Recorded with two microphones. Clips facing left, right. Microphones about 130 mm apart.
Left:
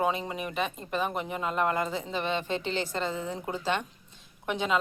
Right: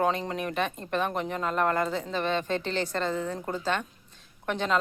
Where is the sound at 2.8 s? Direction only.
10° left (ahead or behind).